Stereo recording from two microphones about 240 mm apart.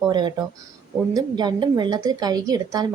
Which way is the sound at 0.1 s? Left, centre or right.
Centre.